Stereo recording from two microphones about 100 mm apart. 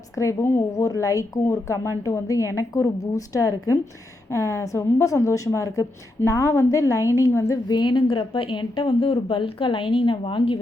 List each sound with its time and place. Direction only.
0.2 s speech: 30° left (ahead or behind)
7.7 s a woman's voice: 50° left (ahead or behind)